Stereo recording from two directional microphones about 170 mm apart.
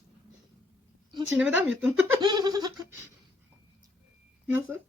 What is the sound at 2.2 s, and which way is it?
Speech, 25° right (ahead or behind).